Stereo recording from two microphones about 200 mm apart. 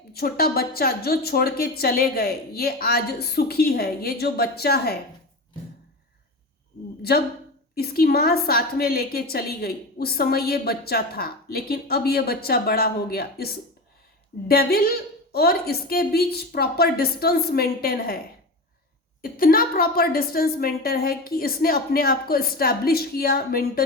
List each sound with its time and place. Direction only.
0.1 s a woman's voice: 50° left (ahead or behind)
7.8 s a woman's voice: 50° left (ahead or behind)
19.2 s a woman's voice: 45° left (ahead or behind)